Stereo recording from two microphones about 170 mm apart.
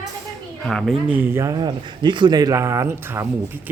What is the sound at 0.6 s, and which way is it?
Speech, 5° left (ahead or behind).